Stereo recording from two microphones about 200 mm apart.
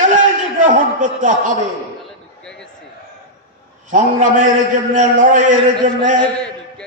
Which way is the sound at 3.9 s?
40° right (ahead or behind).